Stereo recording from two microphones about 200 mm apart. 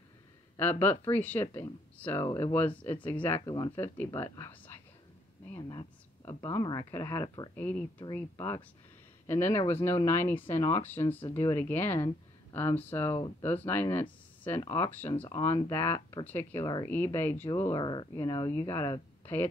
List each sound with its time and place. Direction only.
0.6 s speech: 10° left (ahead or behind)
7.5 s speech: 5° left (ahead or behind)